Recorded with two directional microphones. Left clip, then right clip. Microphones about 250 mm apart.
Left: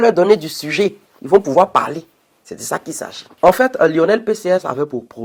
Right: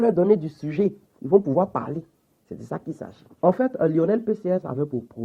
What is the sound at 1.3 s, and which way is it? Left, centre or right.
Speech, left.